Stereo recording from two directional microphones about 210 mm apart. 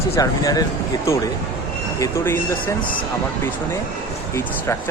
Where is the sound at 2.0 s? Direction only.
15° left (ahead or behind).